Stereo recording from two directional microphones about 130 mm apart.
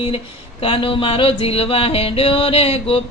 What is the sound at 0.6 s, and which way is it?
Music, 45° left (ahead or behind).